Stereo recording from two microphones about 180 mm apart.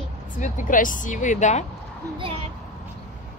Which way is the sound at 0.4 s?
45° left (ahead or behind).